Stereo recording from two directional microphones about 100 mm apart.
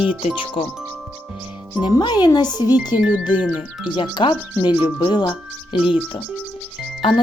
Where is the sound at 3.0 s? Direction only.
15° right (ahead or behind).